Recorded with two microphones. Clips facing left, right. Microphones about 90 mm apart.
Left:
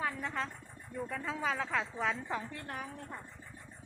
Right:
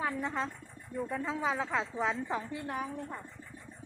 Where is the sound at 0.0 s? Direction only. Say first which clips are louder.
Right 3 dB; 15° right (ahead or behind).